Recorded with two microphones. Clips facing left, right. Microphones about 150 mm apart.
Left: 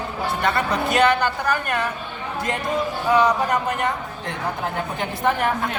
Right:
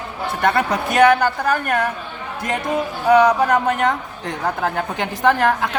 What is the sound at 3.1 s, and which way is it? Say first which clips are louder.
Speech: right 5 dB; 70° right (ahead or behind).